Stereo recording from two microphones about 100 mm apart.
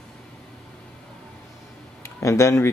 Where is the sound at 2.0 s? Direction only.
30° left (ahead or behind).